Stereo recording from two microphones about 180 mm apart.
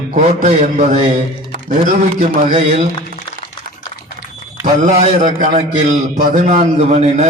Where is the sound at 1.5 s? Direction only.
50° right (ahead or behind).